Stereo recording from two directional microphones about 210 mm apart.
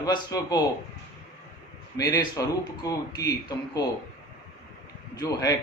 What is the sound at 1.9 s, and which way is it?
A man's voice, 15° left (ahead or behind).